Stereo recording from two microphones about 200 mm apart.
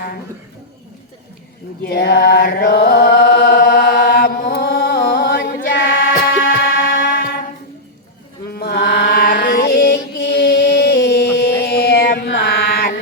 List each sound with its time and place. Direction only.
1.9 s chant: 55° left (ahead or behind)
4.4 s a sound: 55° left (ahead or behind)
5.7 s music: 65° left (ahead or behind)
7.0 s music: 60° left (ahead or behind)
8.4 s mantra: 50° left (ahead or behind)